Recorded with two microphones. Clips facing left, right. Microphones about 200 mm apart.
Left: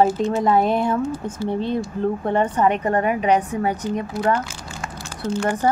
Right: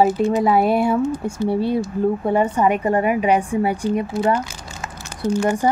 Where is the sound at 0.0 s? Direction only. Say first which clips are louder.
Right 2 dB; 5° right (ahead or behind).